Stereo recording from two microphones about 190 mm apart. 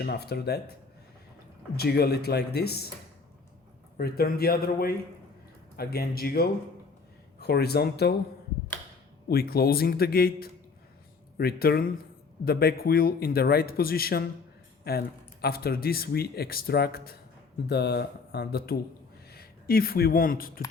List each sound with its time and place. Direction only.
0.0 s speech: 55° left (ahead or behind)
1.7 s speech: 55° left (ahead or behind)
3.9 s speech: 50° left (ahead or behind)
9.3 s speech: 55° left (ahead or behind)